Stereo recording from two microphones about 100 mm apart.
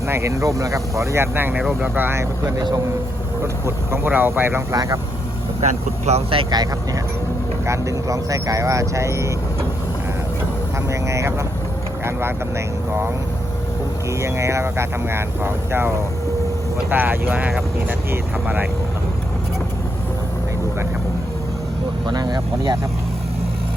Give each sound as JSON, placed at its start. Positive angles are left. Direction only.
{"t": 0.1, "sound": "speech", "side_deg": -30}
{"t": 4.7, "sound": "speech", "side_deg": -35}
{"t": 6.1, "sound": "speech", "side_deg": -90}
{"t": 6.5, "sound": "speech", "side_deg": -40}
{"t": 10.8, "sound": "speech", "side_deg": -30}
{"t": 14.2, "sound": "speech", "side_deg": -30}
{"t": 22.0, "sound": "speech", "side_deg": -45}